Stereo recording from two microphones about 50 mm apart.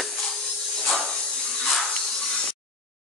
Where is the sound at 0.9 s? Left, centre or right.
Centre.